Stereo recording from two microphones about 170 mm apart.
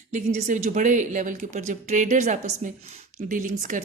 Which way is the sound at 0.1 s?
45° right (ahead or behind).